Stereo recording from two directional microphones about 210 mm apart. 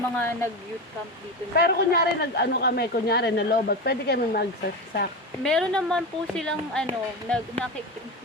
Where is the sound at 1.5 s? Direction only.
45° left (ahead or behind).